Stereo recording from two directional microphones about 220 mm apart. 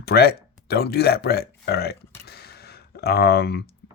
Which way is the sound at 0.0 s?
45° left (ahead or behind).